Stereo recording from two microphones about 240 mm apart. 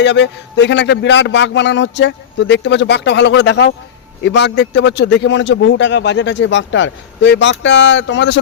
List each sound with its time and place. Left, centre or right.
0.0 s a man's voice: left